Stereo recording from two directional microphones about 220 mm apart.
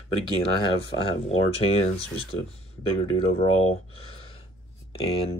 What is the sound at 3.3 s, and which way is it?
Speech, 25° left (ahead or behind).